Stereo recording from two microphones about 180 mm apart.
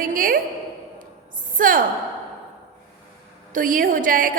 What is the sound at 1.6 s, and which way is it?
Speech, 50° right (ahead or behind).